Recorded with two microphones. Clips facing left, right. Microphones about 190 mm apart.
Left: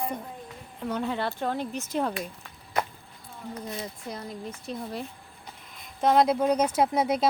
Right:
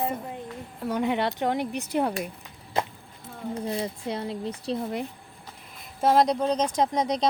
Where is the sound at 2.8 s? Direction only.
25° right (ahead or behind).